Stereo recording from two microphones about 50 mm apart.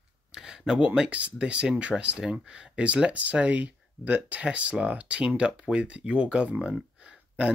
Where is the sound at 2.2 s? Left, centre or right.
Centre.